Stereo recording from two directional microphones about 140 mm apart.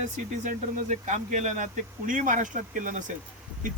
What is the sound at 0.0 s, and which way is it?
Speech, 60° right (ahead or behind).